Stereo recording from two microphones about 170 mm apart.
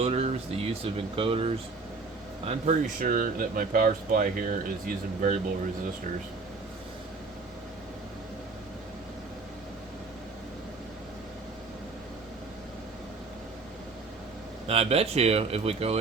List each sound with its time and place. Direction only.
0.0 s speech: 35° right (ahead or behind)
14.7 s speech: 35° right (ahead or behind)